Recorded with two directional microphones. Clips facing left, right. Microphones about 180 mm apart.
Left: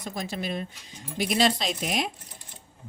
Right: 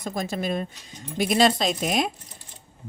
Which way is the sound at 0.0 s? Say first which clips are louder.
Right 4 dB; 45° right (ahead or behind).